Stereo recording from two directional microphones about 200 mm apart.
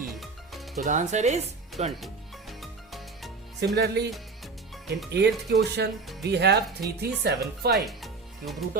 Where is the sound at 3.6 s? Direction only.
55° right (ahead or behind).